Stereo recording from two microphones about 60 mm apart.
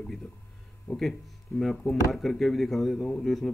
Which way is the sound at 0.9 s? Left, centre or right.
Left.